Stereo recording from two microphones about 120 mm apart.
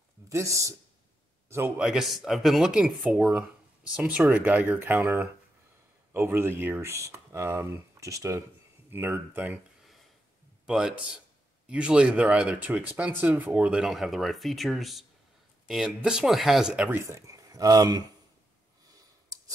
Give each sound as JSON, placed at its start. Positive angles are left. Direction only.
{"t": 0.3, "sound": "speech", "side_deg": -25}
{"t": 1.8, "sound": "a man's voice", "side_deg": -5}
{"t": 10.7, "sound": "a man's voice", "side_deg": -5}
{"t": 16.9, "sound": "speech", "side_deg": -25}